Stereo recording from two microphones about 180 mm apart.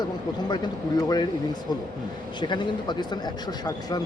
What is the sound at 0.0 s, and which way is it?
Speech, 25° left (ahead or behind).